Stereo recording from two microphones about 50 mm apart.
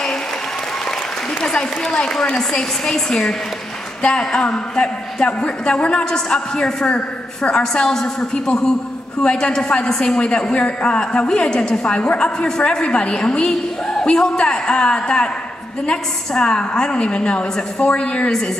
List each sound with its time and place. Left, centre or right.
1.4 s a woman's voice: centre